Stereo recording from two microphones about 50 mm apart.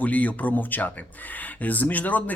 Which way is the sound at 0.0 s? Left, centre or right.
Left.